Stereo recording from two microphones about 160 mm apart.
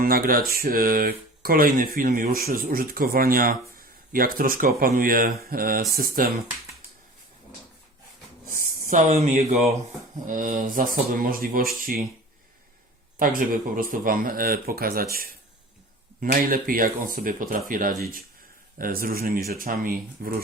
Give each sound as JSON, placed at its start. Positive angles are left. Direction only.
{"t": 0.0, "sound": "speech", "side_deg": -65}
{"t": 8.4, "sound": "speech", "side_deg": -55}
{"t": 13.1, "sound": "speech", "side_deg": -60}